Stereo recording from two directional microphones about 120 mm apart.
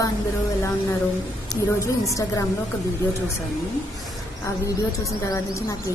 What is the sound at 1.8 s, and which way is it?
Speech, 25° left (ahead or behind).